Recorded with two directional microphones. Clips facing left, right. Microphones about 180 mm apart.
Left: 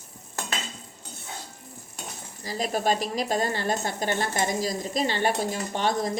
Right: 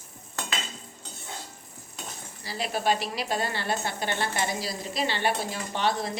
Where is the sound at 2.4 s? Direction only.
45° left (ahead or behind).